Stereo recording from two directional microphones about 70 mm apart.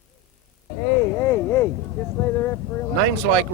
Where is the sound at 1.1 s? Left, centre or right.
Left.